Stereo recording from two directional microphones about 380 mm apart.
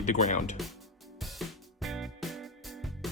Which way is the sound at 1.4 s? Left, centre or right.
Centre.